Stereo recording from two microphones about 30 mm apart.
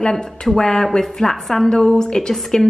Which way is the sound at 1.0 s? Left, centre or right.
Centre.